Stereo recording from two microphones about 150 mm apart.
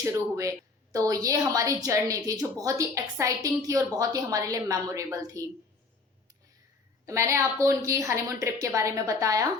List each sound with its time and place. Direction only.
0.0 s a woman's voice: 20° right (ahead or behind)
7.0 s a woman's voice: 20° right (ahead or behind)